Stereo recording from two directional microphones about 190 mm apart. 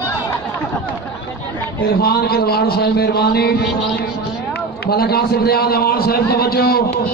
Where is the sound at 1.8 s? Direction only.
55° left (ahead or behind).